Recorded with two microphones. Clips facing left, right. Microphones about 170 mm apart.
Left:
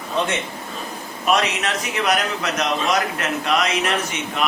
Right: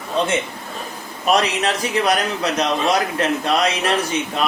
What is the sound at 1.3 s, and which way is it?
A man's voice, 35° right (ahead or behind).